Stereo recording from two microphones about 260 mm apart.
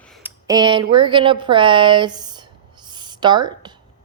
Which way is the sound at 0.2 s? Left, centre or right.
Centre.